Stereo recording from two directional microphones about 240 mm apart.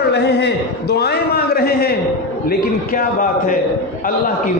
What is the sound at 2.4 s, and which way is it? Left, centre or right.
A man's voice, left.